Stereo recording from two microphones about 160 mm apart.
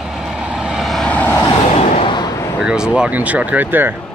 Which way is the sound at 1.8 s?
40° left (ahead or behind).